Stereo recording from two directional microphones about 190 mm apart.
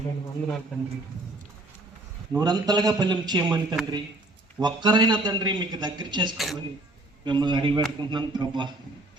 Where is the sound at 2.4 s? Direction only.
20° right (ahead or behind).